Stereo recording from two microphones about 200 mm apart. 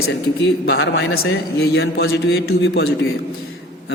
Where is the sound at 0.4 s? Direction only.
60° left (ahead or behind); by 1.4 s 80° left.